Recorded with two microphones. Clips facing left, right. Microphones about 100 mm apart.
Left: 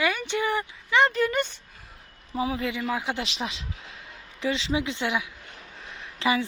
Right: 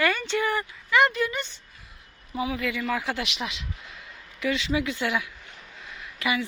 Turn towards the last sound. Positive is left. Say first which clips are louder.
# left 3 dB
turn(degrees=30)  # may be behind; listen again after turning